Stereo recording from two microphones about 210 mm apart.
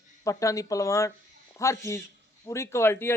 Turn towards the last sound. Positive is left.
turn(degrees=10)  # may be behind; listen again after turning